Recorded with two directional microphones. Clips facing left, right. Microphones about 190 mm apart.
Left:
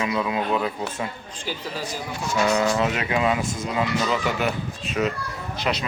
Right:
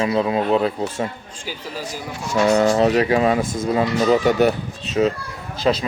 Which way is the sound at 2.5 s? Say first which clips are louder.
Right 7 dB; 35° right (ahead or behind).